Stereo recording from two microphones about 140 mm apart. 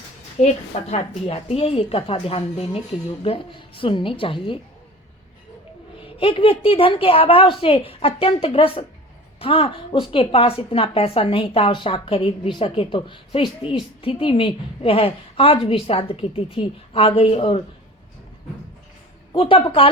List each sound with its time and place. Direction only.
0.3 s a woman's voice: 50° left (ahead or behind)
6.1 s a woman's voice: 40° left (ahead or behind)
19.3 s a woman's voice: 40° left (ahead or behind)